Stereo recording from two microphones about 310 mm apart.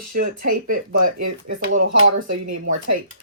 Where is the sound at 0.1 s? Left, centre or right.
Right.